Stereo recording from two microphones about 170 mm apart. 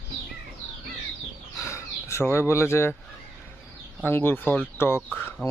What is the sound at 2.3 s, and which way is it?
Speech, 15° left (ahead or behind).